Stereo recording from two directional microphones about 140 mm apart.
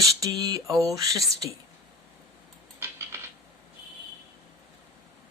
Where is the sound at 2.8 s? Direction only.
20° right (ahead or behind).